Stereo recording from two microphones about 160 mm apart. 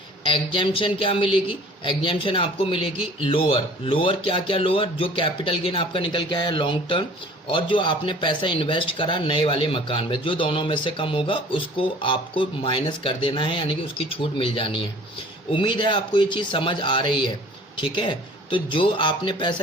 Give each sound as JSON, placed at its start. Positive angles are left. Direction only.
{"t": 0.3, "sound": "speech", "side_deg": 30}